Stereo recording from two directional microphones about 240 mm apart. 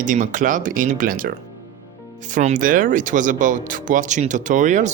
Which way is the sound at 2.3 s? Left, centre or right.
Right.